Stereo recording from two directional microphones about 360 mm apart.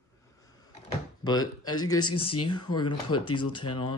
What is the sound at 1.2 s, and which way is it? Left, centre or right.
Speech, centre.